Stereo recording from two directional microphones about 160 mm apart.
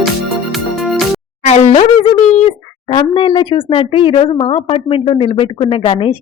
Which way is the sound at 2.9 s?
30° left (ahead or behind).